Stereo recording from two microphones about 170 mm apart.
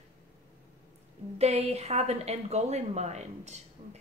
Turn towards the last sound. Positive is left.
turn(degrees=-45)  # may be behind; listen again after turning